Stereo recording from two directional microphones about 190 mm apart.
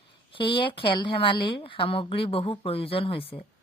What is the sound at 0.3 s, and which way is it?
Speech, 25° left (ahead or behind).